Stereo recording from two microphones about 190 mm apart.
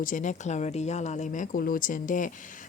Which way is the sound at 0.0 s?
45° left (ahead or behind).